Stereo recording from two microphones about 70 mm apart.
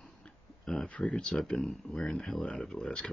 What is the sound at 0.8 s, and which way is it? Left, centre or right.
Speech, centre.